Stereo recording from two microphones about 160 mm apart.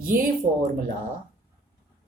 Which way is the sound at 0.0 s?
60° right (ahead or behind).